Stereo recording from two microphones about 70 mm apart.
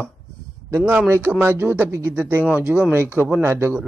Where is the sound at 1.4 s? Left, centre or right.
Right.